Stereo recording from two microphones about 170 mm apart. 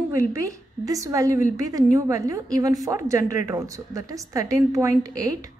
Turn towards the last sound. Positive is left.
turn(degrees=-20)  # may be behind; listen again after turning